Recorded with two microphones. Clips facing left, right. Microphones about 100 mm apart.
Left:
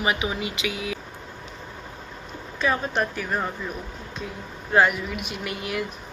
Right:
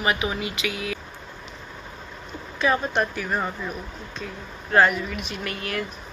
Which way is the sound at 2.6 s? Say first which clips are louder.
Right 2 dB; centre (ahead or behind).